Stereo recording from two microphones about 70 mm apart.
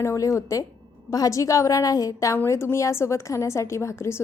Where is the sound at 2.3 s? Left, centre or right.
Left.